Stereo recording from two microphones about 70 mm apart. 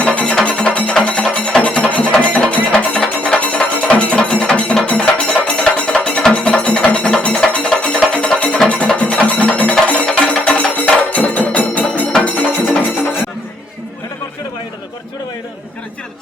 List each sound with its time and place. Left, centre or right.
0.0 s music: centre